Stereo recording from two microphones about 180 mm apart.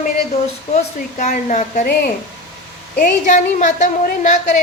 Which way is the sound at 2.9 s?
50° left (ahead or behind).